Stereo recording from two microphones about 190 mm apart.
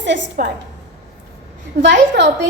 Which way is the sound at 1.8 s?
65° right (ahead or behind).